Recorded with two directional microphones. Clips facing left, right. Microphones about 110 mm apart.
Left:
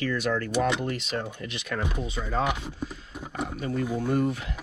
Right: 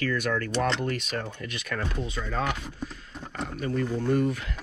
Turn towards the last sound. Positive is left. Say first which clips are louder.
# right 1 dB
turn(degrees=15)  # may be behind; listen again after turning